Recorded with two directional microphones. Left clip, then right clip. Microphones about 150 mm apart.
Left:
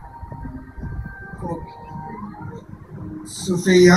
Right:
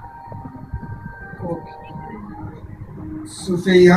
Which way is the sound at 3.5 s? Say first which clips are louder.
Right 1 dB; 45° right (ahead or behind).